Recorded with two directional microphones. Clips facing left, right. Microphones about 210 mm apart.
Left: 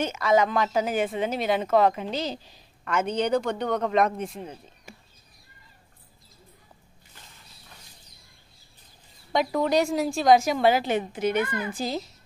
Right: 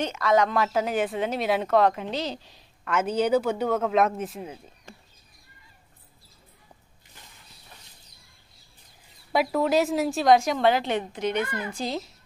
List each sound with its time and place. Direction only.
0.0 s speech: centre (ahead or behind)
4.9 s bird: 5° left (ahead or behind)
9.3 s speech: 5° right (ahead or behind)